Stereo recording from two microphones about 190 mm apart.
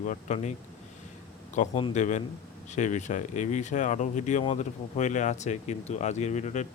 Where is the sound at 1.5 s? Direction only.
35° left (ahead or behind).